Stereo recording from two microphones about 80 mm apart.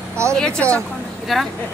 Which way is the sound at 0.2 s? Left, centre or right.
Right.